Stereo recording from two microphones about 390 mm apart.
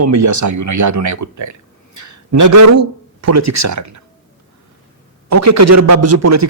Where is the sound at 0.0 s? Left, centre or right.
Right.